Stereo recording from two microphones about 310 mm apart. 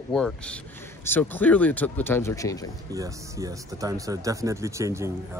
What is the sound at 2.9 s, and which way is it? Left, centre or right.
Speech, centre.